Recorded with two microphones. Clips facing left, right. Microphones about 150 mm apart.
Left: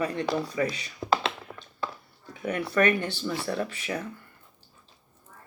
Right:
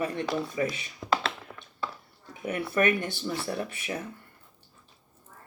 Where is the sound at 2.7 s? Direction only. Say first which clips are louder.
Left 2 dB; 20° right (ahead or behind).